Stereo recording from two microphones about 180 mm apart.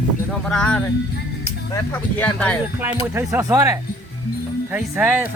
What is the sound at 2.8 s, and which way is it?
Speech, 10° right (ahead or behind).